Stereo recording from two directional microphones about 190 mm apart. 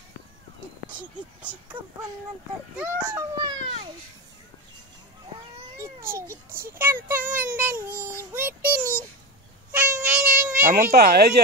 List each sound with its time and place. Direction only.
1.7 s a child's voice: 25° right (ahead or behind)
2.7 s speech: 10° right (ahead or behind)
3.3 s a child's voice: 25° right (ahead or behind)
6.6 s speech: 10° right (ahead or behind)
7.2 s child singing: 45° right (ahead or behind)
7.5 s speech: 10° right (ahead or behind)
9.7 s a sound: 10° right (ahead or behind)
10.6 s speech: 45° right (ahead or behind)